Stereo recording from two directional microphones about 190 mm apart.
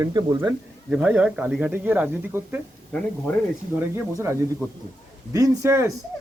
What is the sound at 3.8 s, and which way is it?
Speech, 15° right (ahead or behind).